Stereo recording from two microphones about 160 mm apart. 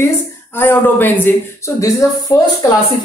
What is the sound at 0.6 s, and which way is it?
Speech, 15° left (ahead or behind).